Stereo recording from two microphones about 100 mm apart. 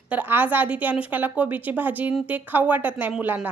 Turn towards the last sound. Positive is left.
turn(degrees=-20)  # may be behind; listen again after turning